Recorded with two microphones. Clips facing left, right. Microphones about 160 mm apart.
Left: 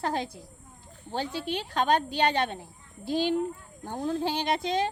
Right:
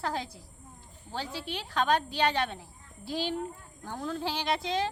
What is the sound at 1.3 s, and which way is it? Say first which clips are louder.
Speech: left 1 dB; 20° left (ahead or behind).